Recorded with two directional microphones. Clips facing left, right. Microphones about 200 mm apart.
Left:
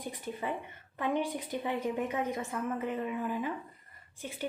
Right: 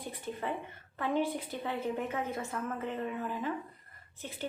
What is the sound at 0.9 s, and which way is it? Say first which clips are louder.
A woman's voice: even; 15° left (ahead or behind).